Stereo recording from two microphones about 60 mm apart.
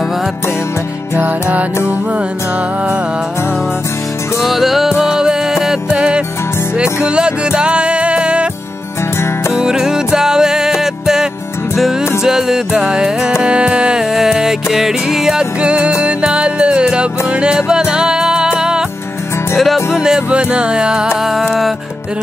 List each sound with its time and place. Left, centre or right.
1.1 s music: right
4.4 s music: centre
9.5 s music: centre